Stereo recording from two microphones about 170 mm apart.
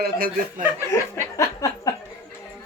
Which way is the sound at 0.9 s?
15° left (ahead or behind).